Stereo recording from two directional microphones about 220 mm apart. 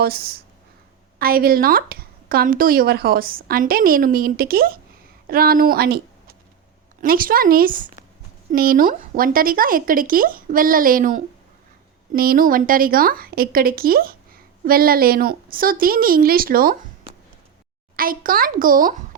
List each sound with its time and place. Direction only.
0.0 s a woman's voice: 45° right (ahead or behind)
17.9 s a woman's voice: 40° right (ahead or behind)